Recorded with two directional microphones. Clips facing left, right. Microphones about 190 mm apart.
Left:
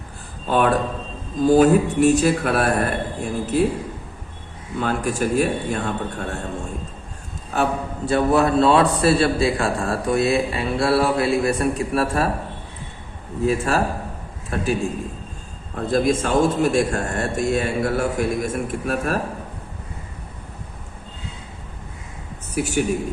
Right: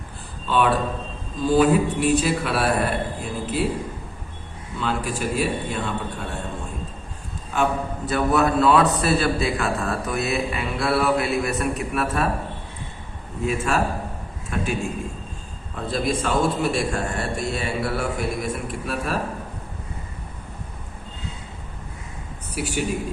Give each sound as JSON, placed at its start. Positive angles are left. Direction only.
{"t": 0.4, "sound": "a man's voice", "side_deg": 45}
{"t": 4.8, "sound": "a man's voice", "side_deg": 50}
{"t": 7.5, "sound": "a man's voice", "side_deg": 35}
{"t": 13.4, "sound": "a man's voice", "side_deg": 35}
{"t": 15.7, "sound": "a man's voice", "side_deg": 45}
{"t": 22.5, "sound": "a man's voice", "side_deg": 45}